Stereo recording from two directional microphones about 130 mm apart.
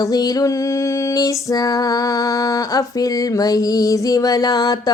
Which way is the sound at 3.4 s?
30° left (ahead or behind).